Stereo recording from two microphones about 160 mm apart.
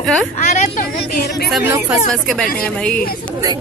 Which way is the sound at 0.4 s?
50° left (ahead or behind).